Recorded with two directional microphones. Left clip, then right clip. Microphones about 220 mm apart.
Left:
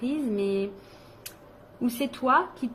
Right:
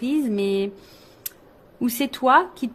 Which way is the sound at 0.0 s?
50° right (ahead or behind).